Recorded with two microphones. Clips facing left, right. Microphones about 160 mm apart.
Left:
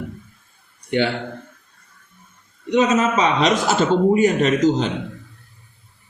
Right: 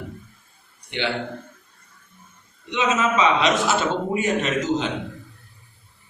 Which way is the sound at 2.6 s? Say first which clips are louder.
Left 5 dB; 40° left (ahead or behind).